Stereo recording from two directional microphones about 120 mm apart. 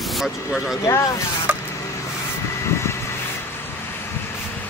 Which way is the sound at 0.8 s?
25° left (ahead or behind).